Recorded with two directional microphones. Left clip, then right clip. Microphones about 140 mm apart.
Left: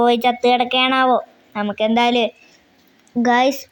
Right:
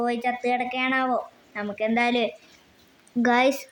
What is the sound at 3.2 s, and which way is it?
Speech, centre (ahead or behind).